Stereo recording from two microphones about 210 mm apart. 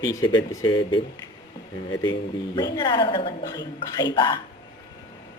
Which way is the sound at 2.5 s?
20° left (ahead or behind).